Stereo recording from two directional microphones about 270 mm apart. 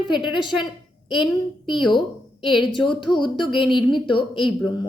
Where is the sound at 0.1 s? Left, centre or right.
Centre.